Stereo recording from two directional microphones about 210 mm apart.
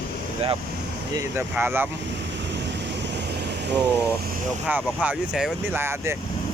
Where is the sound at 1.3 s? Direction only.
10° right (ahead or behind).